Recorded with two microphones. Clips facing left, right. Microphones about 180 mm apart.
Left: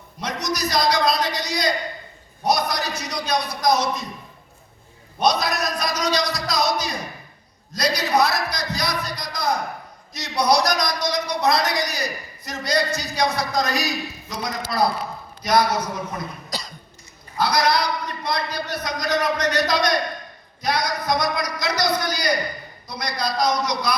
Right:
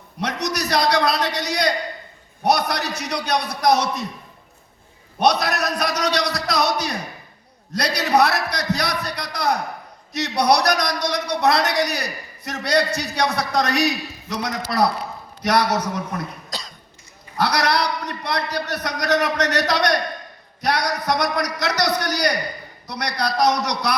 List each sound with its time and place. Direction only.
0.2 s a sound: 65° right (ahead or behind)
2.4 s a man's voice: 65° right (ahead or behind)
5.2 s a man's voice: 65° right (ahead or behind)
16.5 s cough: centre (ahead or behind)
17.3 s a man's voice: 70° right (ahead or behind)